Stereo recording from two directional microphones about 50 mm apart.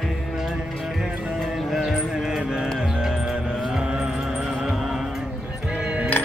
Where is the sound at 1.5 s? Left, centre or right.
Centre.